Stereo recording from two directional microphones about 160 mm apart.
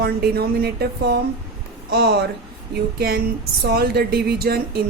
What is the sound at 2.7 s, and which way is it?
Speech, 80° right.